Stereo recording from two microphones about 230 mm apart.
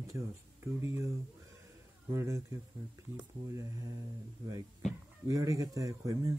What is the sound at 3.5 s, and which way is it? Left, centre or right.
Speech, centre.